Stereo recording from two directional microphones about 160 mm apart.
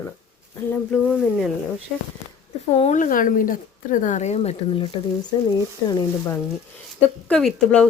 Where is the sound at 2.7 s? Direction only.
45° left (ahead or behind).